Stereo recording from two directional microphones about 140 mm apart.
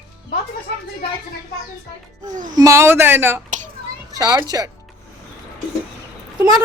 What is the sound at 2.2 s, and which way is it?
Speech, 65° right (ahead or behind).